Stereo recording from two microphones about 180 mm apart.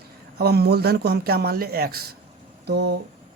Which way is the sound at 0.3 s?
60° right (ahead or behind).